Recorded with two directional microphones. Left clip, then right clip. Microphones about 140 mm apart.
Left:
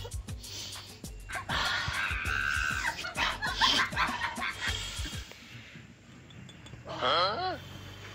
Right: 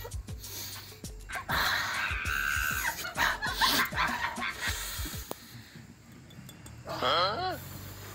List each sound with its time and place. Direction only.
1.0 s music: centre (ahead or behind)
1.5 s music: 15° right (ahead or behind)
2.0 s music: centre (ahead or behind)
3.3 s a sound: centre (ahead or behind)
3.5 s music: 10° right (ahead or behind)
3.8 s music: centre (ahead or behind)
4.7 s music: 20° right (ahead or behind)
7.0 s a sound: centre (ahead or behind)